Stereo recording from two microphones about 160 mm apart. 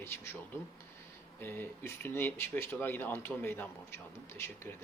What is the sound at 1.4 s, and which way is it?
Speech, 15° left (ahead or behind).